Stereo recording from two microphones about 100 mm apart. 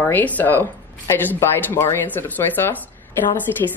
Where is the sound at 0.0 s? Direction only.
15° left (ahead or behind).